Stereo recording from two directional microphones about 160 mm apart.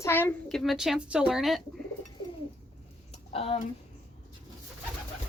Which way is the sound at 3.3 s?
40° left (ahead or behind).